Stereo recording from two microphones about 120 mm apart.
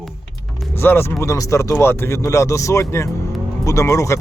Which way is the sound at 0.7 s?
20° left (ahead or behind).